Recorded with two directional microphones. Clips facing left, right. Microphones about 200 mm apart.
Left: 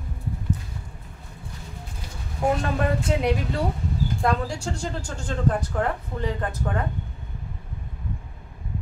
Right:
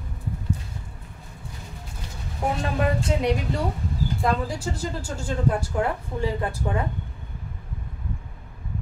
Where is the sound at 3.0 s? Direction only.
Centre (ahead or behind).